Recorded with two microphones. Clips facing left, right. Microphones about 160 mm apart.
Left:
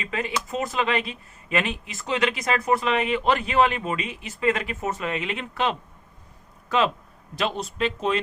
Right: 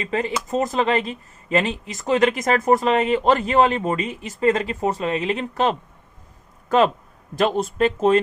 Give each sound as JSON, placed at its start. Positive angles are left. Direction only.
{"t": 0.0, "sound": "speech", "side_deg": -35}